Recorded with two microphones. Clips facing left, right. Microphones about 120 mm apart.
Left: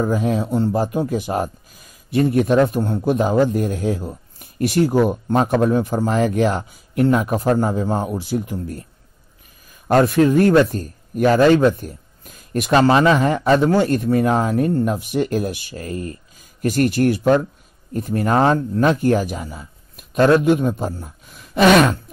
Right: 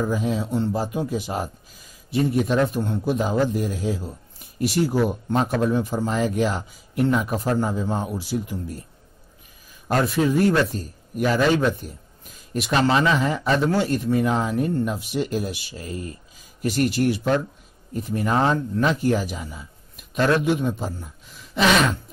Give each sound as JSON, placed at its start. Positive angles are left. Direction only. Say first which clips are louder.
{"t": 0.0, "sound": "a man's voice", "louder": "left 4 dB", "side_deg": 55}
{"t": 9.8, "sound": "a man's voice", "louder": "left 7 dB", "side_deg": 55}